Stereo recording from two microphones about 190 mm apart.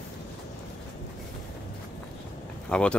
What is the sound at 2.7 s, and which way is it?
Speech, 5° left (ahead or behind).